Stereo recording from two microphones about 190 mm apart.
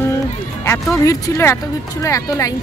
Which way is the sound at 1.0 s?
15° left (ahead or behind).